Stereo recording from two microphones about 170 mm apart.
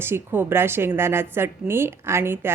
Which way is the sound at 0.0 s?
15° right (ahead or behind).